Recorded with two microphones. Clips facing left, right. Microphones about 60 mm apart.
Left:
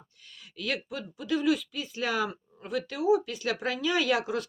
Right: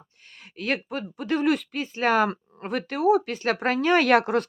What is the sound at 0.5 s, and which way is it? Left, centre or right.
Speech, right.